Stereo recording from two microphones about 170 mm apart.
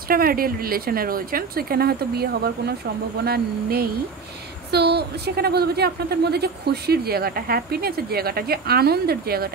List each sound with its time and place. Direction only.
0.1 s speech: 60° right (ahead or behind)
4.6 s a woman's voice: 75° right (ahead or behind)